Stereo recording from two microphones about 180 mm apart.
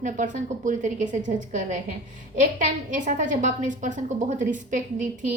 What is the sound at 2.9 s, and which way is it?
A woman's voice, 45° right (ahead or behind).